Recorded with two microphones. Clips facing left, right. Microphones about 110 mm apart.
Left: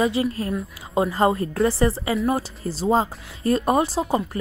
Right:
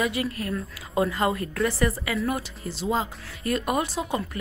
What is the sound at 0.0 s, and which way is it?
A woman's voice, 25° left (ahead or behind).